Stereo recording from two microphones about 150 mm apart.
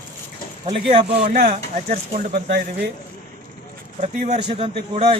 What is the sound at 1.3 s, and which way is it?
Speech, 65° right (ahead or behind).